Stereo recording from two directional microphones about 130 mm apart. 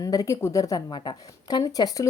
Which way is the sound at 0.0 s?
25° left (ahead or behind).